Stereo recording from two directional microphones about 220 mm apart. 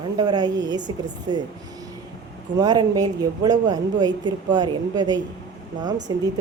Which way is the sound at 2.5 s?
20° right (ahead or behind).